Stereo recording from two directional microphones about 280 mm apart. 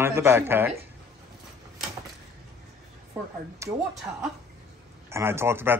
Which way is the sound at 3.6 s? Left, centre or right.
Centre.